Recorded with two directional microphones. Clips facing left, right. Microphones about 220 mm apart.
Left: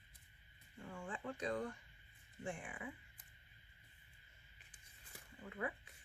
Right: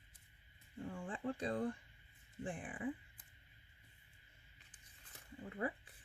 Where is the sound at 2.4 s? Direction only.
35° right (ahead or behind).